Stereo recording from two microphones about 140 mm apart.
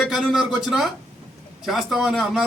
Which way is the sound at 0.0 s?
Centre (ahead or behind).